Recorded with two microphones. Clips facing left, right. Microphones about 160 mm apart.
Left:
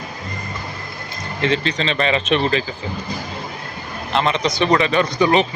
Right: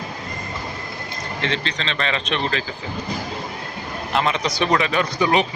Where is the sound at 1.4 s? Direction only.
5° left (ahead or behind).